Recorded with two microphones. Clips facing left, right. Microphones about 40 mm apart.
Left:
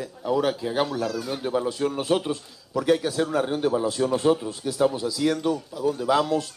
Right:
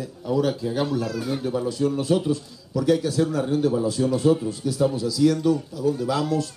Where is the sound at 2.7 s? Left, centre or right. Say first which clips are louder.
Right 1 dB; left.